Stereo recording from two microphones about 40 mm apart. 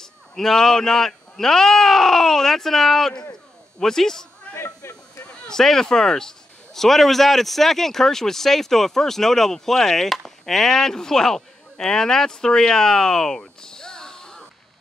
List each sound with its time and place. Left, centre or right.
0.0 s a man's voice: centre
4.8 s speech: left
5.5 s a man's voice: centre
13.6 s music: centre